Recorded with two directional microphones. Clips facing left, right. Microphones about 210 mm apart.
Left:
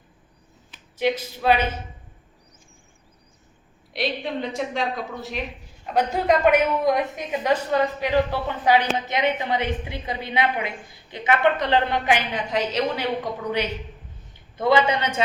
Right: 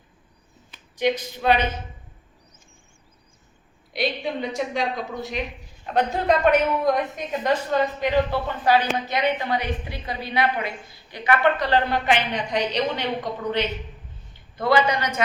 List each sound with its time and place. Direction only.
0.7 s speech: 5° left (ahead or behind)
3.9 s a man's voice: centre (ahead or behind); by 12.1 s 20° left (ahead or behind)
12.3 s a man's voice: centre (ahead or behind)
14.5 s a woman's voice: 20° left (ahead or behind)